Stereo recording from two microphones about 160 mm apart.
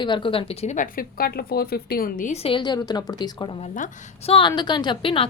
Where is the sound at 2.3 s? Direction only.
35° left (ahead or behind).